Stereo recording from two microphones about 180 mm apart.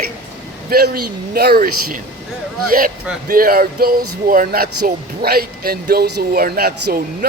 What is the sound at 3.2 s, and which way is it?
Speech, 55° right (ahead or behind).